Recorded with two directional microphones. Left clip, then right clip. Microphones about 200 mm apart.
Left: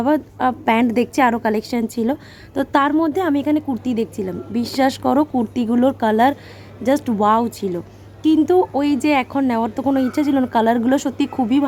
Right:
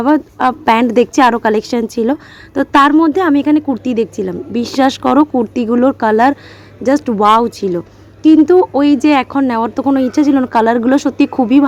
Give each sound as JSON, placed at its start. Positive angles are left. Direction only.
{"t": 0.0, "sound": "a woman's voice", "side_deg": -10}